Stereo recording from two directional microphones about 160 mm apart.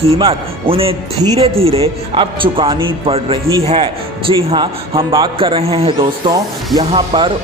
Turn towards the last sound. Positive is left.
turn(degrees=-30)  # may be behind; listen again after turning